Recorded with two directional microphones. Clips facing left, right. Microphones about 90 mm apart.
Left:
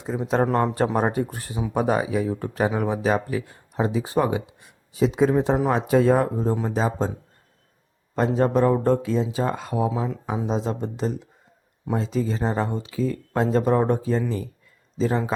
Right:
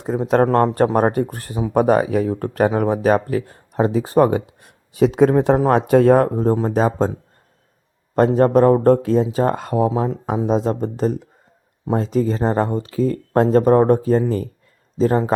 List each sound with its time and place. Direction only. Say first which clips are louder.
0.0 s speech: right 6 dB; 50° right (ahead or behind)
8.1 s speech: right 7 dB; 50° right (ahead or behind)